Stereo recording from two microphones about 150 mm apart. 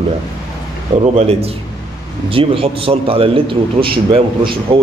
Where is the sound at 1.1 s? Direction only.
45° right (ahead or behind).